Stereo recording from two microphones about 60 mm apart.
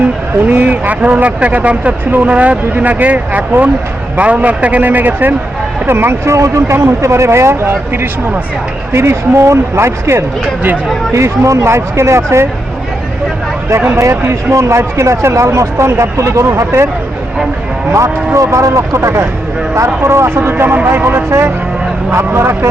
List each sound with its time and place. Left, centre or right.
0.4 s speech: right
5.8 s speech: right
8.9 s speech: right
13.7 s speech: right
17.9 s speech: right